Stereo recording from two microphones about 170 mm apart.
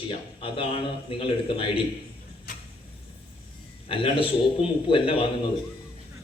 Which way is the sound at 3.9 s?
30° left (ahead or behind).